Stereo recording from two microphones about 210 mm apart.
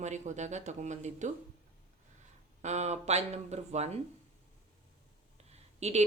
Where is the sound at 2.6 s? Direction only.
35° right (ahead or behind).